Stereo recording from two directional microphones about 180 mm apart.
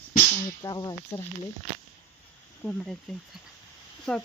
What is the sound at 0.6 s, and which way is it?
Speech, 20° left (ahead or behind).